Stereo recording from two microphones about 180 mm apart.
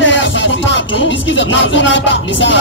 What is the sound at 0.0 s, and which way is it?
Music, 90° left.